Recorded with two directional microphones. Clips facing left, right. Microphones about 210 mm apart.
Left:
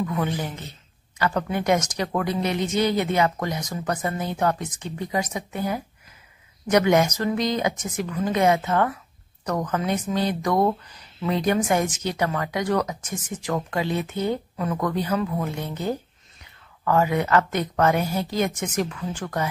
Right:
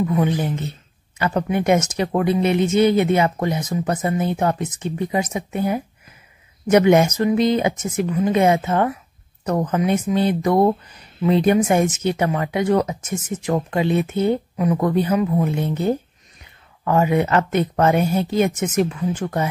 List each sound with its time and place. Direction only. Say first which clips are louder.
0.0 s speech: right 6 dB; 20° right (ahead or behind)